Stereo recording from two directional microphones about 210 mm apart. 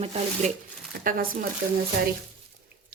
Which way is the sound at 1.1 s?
40° right (ahead or behind).